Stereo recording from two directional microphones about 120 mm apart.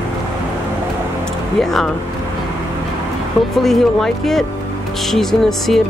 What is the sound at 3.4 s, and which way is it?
Speech, centre (ahead or behind).